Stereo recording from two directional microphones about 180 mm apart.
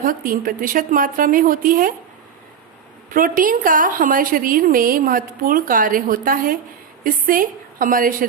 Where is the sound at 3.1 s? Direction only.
50° right (ahead or behind).